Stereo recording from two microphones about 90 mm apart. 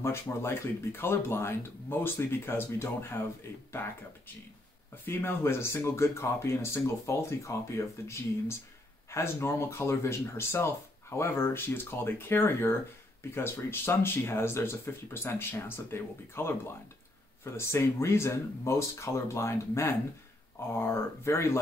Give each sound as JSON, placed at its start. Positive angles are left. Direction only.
{"t": 0.0, "sound": "speech", "side_deg": 30}
{"t": 5.0, "sound": "speech", "side_deg": 25}